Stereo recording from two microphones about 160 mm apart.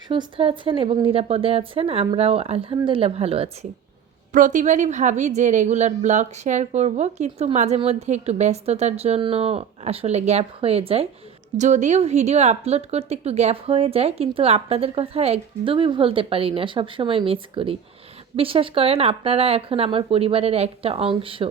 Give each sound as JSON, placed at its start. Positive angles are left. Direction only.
{"t": 0.1, "sound": "a woman's voice", "side_deg": -35}
{"t": 4.3, "sound": "a woman's voice", "side_deg": -55}
{"t": 11.5, "sound": "a woman's voice", "side_deg": -50}